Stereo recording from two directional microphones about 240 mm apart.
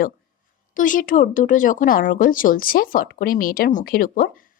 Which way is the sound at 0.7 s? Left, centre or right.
Left.